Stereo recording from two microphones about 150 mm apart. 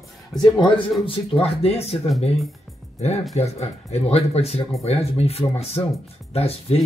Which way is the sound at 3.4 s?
45° left (ahead or behind).